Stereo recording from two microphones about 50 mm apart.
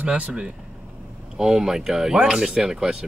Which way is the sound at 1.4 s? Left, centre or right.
Centre.